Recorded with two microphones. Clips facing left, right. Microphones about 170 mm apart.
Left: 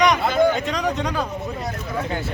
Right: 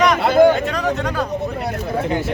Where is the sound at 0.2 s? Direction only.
70° right (ahead or behind).